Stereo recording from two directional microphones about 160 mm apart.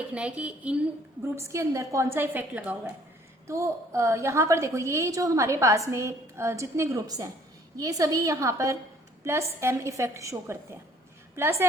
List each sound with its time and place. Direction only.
0.1 s a woman's voice: 10° right (ahead or behind)